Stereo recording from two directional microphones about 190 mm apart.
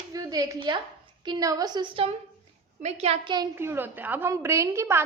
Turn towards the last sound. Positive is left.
turn(degrees=-15)  # may be behind; listen again after turning